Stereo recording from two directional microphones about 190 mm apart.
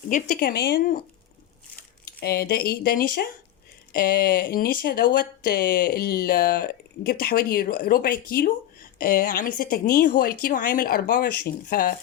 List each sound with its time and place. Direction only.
0.1 s speech: 50° left (ahead or behind)
2.0 s speech: 55° left (ahead or behind)